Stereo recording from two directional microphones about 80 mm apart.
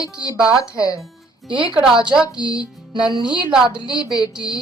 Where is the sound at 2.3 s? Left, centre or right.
Left.